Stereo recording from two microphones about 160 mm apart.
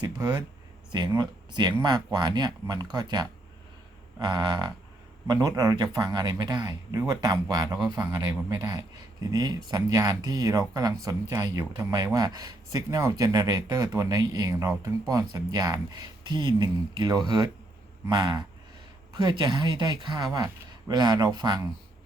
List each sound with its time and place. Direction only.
0.0 s speech: 25° right (ahead or behind)